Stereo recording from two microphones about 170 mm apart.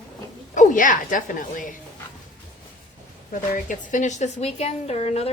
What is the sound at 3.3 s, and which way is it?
A woman's voice, 50° left (ahead or behind).